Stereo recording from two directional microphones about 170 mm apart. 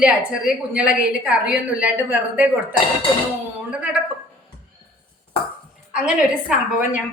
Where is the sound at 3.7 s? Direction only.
5° right (ahead or behind).